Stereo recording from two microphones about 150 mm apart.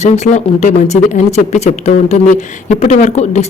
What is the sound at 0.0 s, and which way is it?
Speech, 50° left (ahead or behind).